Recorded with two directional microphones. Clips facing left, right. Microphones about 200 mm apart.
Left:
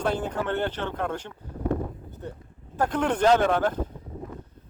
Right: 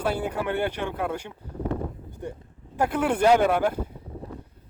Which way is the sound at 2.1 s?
15° right (ahead or behind).